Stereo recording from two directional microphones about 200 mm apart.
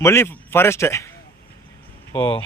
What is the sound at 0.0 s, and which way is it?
A man's voice, 15° left (ahead or behind).